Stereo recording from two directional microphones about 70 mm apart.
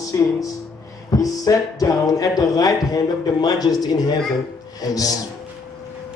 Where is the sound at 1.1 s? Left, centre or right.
Left.